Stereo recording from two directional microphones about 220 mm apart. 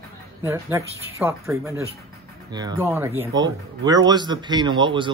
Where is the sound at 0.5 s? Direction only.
10° right (ahead or behind).